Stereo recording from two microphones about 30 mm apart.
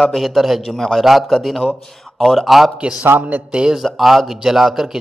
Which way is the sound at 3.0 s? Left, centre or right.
Right.